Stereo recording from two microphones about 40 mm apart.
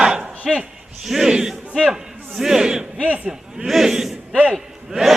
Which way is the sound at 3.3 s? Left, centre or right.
Centre.